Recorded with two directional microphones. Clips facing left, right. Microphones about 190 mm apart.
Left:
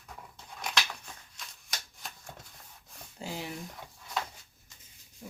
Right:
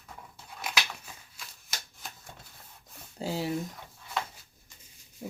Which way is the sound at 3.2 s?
35° right (ahead or behind).